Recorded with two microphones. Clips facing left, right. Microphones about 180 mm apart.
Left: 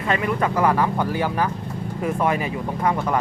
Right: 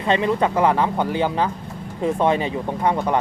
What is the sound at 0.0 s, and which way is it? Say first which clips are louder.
Speech: right 3 dB; 25° right (ahead or behind).